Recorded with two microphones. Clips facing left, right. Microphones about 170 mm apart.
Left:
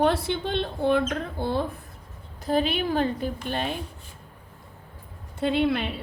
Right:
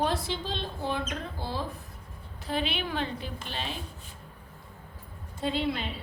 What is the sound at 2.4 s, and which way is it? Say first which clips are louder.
A woman's voice: left 7 dB; 45° left (ahead or behind).